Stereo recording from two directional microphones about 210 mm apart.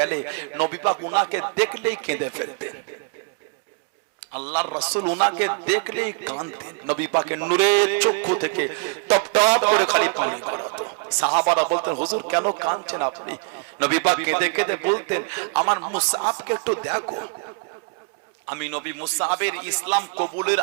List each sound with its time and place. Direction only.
0.0 s a man's voice: 15° right (ahead or behind)
4.4 s a man's voice: 10° right (ahead or behind)
18.4 s a man's voice: 15° right (ahead or behind)